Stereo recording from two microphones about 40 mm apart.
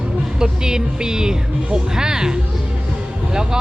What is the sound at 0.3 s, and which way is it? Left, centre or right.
Speech, centre.